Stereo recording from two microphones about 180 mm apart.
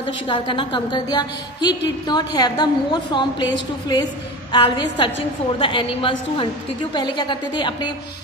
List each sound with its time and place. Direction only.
0.0 s a woman's voice: 30° left (ahead or behind)